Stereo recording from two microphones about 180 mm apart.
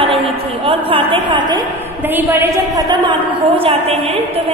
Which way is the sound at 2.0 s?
10° right (ahead or behind).